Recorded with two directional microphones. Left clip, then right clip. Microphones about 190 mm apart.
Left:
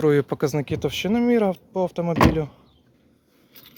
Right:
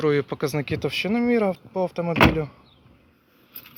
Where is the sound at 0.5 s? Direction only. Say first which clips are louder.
Even; 20° left (ahead or behind).